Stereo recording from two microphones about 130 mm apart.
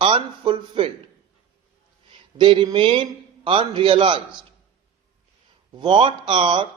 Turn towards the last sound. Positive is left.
turn(degrees=-40)  # may be behind; listen again after turning